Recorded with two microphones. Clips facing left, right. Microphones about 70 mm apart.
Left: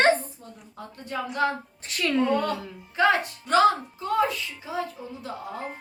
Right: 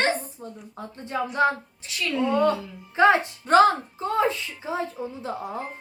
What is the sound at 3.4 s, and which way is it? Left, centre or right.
A woman's voice, right.